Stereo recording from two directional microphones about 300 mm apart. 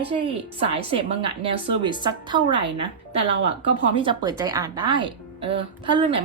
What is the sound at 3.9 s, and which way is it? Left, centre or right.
Speech, centre.